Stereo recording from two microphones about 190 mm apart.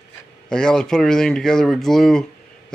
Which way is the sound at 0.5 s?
5° left (ahead or behind).